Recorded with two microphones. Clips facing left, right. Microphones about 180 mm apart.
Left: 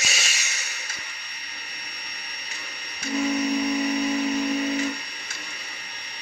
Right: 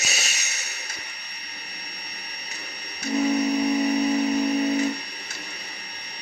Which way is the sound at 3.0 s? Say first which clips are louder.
Right 2 dB; 40° right (ahead or behind).